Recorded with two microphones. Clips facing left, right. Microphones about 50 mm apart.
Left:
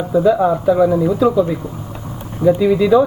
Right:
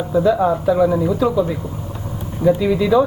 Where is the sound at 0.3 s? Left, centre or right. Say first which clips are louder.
Left 2 dB; centre.